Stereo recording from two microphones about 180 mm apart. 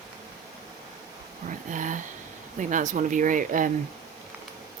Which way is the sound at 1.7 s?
45° right (ahead or behind).